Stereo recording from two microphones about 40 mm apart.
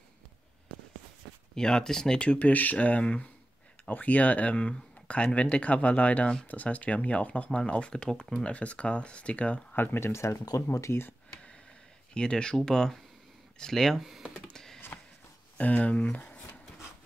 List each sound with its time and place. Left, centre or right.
1.5 s speech: centre
2.1 s speech: left
9.8 s speech: left
12.1 s speech: left
14.3 s computer keyboard: centre
15.5 s speech: left